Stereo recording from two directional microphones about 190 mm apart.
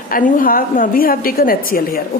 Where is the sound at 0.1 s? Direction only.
45° left (ahead or behind).